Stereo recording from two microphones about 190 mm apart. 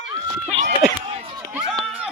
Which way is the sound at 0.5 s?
30° right (ahead or behind).